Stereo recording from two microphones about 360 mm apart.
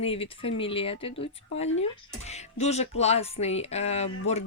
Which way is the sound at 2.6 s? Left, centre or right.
Centre.